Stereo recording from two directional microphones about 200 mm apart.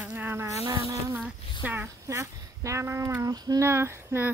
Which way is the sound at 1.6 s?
10° right (ahead or behind).